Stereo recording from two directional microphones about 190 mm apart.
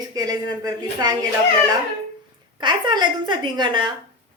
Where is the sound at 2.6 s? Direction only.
25° right (ahead or behind).